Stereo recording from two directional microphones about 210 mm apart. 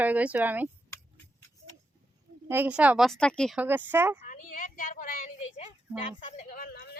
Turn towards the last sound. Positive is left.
turn(degrees=45)  # may be behind; listen again after turning